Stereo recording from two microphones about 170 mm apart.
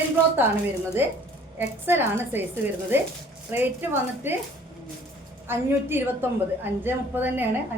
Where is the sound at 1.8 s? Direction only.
10° right (ahead or behind).